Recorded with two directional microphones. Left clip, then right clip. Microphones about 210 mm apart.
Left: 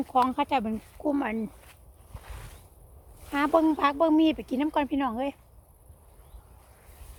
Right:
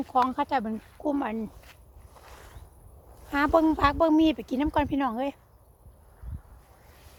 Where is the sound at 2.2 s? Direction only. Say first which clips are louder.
Left 1 dB; 10° left (ahead or behind).